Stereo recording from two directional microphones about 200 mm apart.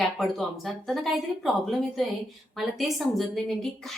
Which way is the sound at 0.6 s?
Centre (ahead or behind).